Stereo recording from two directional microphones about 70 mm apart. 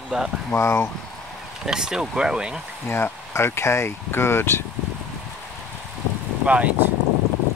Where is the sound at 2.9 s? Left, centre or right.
Left.